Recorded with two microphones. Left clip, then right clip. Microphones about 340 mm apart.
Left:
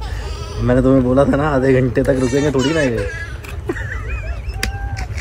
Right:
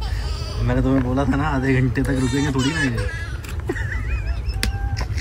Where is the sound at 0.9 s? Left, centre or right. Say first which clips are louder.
Left 7 dB; left.